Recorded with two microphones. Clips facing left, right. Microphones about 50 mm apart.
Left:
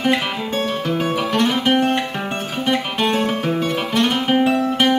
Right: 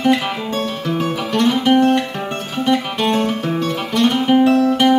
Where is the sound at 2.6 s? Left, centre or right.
Centre.